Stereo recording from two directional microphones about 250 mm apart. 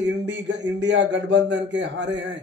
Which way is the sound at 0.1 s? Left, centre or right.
Right.